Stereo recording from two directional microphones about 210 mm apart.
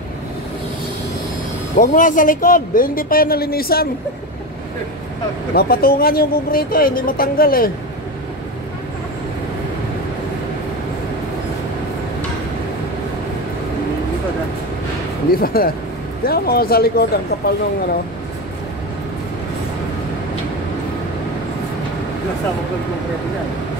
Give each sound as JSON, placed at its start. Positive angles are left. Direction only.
{"t": 1.8, "sound": "speech", "side_deg": 40}
{"t": 5.5, "sound": "speech", "side_deg": 45}
{"t": 15.3, "sound": "speech", "side_deg": 45}